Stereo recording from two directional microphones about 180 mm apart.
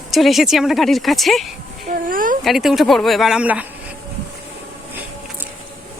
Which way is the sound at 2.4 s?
Centre (ahead or behind).